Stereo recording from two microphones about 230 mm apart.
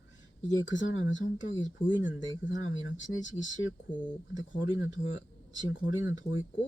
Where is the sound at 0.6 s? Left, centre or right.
Left.